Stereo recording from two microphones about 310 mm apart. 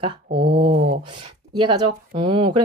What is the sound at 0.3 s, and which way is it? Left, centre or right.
Speech, right.